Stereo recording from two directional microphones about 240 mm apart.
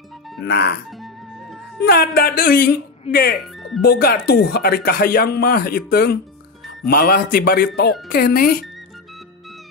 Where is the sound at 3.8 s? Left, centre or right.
Left.